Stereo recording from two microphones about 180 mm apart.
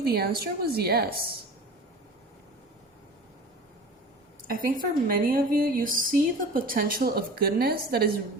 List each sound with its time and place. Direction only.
0.0 s a woman's voice: 60° right (ahead or behind)
4.4 s a woman's voice: 50° right (ahead or behind)